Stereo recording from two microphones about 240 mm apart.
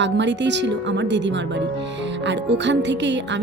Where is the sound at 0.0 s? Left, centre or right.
Right.